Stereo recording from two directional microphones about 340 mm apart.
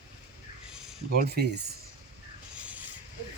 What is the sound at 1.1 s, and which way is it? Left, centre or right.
Speech, right.